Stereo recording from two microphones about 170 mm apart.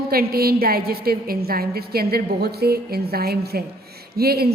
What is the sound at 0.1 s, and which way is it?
A man's voice, 65° right (ahead or behind).